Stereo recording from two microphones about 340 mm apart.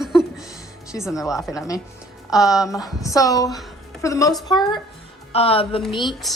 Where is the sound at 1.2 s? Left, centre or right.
Centre.